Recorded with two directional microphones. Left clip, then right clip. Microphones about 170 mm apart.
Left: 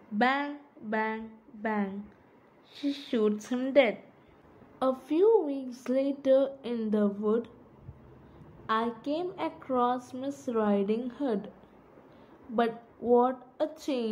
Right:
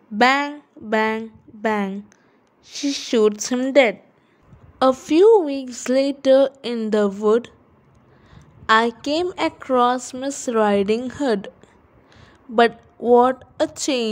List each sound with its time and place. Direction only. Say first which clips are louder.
0.2 s a woman's voice: right 11 dB; 65° right (ahead or behind)
8.6 s a woman's voice: right 13 dB; 55° right (ahead or behind)
12.5 s a woman's voice: right 13 dB; 60° right (ahead or behind)